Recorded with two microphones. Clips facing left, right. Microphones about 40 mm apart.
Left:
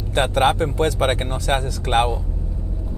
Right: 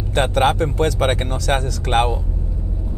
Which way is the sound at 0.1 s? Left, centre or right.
Right.